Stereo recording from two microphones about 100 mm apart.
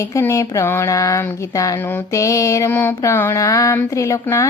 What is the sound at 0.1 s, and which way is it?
A woman's voice, 30° left (ahead or behind).